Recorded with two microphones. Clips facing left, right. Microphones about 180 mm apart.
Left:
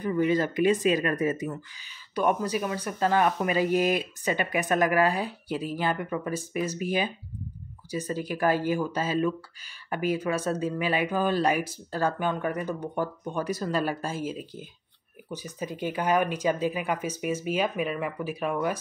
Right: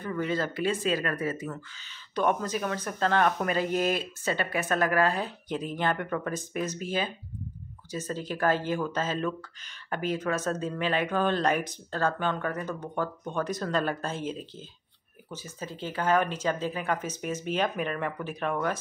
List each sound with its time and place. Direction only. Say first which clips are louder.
0.0 s speech: left 5 dB; 15° left (ahead or behind)